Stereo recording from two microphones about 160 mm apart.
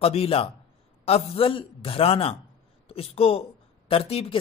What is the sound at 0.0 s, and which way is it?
A man's voice, 40° left (ahead or behind).